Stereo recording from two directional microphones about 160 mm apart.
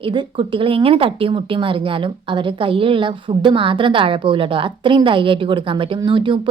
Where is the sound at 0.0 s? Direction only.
30° right (ahead or behind).